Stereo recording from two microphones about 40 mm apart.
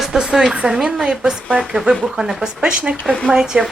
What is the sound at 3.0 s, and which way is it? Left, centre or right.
Speech, centre.